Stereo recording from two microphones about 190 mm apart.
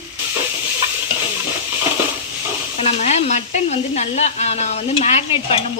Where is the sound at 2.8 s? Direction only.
35° left (ahead or behind).